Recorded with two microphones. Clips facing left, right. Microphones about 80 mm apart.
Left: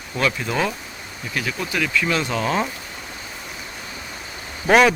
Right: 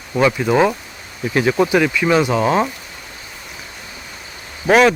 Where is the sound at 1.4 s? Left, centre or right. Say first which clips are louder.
Right 11 dB; right.